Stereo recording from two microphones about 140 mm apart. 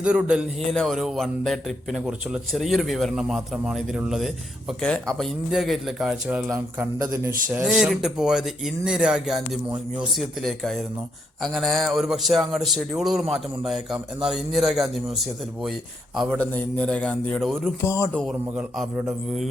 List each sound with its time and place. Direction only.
0.0 s a man's voice: 5° right (ahead or behind)
0.6 s a man's voice: 5° left (ahead or behind)
6.7 s a man's voice: 15° right (ahead or behind)
16.4 s a man's voice: 10° left (ahead or behind)
17.8 s speech: 20° left (ahead or behind)
18.3 s a man's voice: 5° right (ahead or behind)